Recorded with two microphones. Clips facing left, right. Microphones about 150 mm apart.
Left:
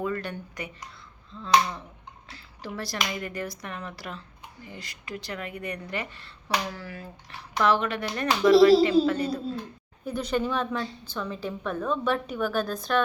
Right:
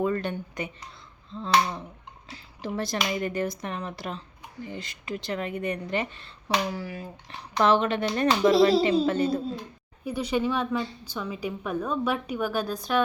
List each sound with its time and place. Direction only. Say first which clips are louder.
0.0 s speech: right 4 dB; 25° right (ahead or behind)
10.0 s a woman's voice: right 1 dB; 10° right (ahead or behind)